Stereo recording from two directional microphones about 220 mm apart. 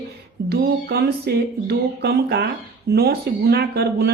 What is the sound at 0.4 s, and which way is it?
Speech, 45° right (ahead or behind).